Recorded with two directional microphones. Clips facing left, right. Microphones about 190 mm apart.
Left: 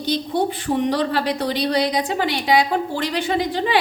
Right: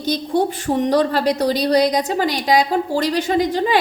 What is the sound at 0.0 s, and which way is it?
A woman's voice, 45° right (ahead or behind).